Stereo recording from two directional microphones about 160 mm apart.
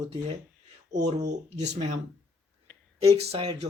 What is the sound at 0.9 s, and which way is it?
Speech, 25° right (ahead or behind).